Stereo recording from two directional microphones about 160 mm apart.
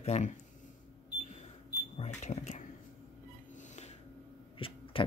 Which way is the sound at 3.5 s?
45° left (ahead or behind).